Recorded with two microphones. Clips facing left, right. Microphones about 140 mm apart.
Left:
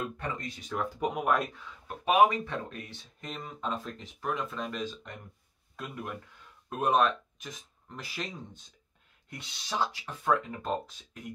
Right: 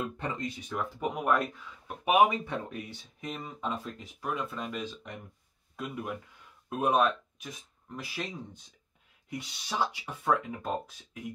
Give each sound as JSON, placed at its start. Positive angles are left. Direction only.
{"t": 0.2, "sound": "speech", "side_deg": -20}
{"t": 0.9, "sound": "speech", "side_deg": 10}
{"t": 2.0, "sound": "speech", "side_deg": -15}